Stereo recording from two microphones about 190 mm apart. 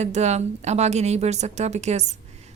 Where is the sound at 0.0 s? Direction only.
35° right (ahead or behind).